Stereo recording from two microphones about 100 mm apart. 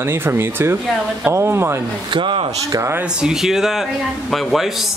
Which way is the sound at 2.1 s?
60° right (ahead or behind).